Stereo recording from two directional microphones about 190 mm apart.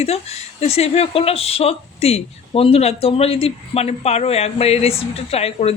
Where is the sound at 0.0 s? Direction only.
35° left (ahead or behind).